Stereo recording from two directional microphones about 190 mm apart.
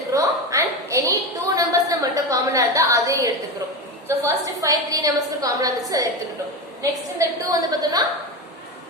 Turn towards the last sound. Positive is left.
turn(degrees=-20)  # may be behind; listen again after turning